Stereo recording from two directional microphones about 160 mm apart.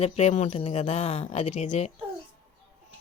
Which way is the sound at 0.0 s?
45° left (ahead or behind).